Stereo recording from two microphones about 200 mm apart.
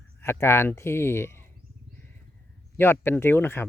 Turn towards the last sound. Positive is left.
turn(degrees=10)  # may be behind; listen again after turning